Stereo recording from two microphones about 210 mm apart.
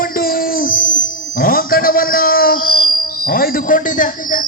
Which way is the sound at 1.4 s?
40° left (ahead or behind).